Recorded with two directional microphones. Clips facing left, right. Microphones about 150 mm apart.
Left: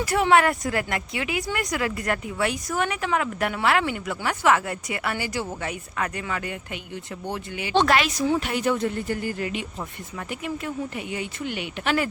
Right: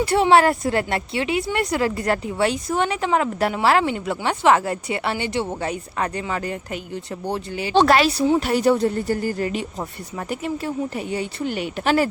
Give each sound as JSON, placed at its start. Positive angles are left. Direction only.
{"t": 0.0, "sound": "speech", "side_deg": -30}